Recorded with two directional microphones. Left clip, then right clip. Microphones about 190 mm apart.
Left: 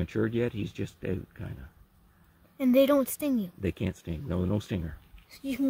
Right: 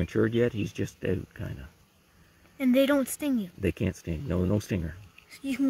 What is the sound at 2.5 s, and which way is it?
Speech, 50° left (ahead or behind).